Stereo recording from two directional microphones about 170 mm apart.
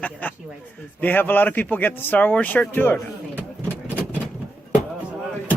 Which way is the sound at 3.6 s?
10° left (ahead or behind).